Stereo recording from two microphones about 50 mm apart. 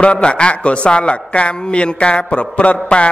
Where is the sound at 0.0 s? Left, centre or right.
Left.